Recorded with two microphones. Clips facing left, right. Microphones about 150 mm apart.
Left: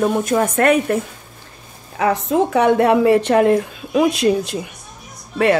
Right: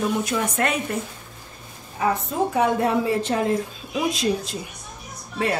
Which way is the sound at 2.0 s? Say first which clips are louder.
Left 6 dB; 85° left.